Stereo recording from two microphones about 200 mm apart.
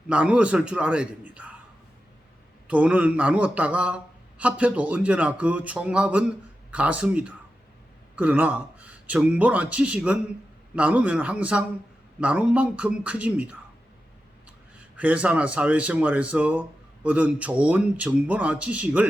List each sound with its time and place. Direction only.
0.1 s a man's voice: 5° right (ahead or behind)
2.6 s a man's voice: 5° right (ahead or behind)
14.9 s a man's voice: 5° right (ahead or behind)